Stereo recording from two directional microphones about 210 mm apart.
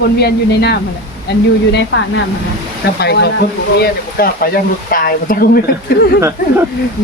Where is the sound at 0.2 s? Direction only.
50° left (ahead or behind).